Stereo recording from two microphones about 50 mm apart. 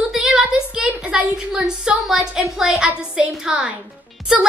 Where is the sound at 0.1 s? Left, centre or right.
Centre.